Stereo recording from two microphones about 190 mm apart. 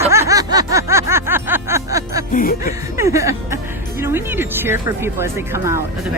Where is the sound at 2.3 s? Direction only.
45° left (ahead or behind).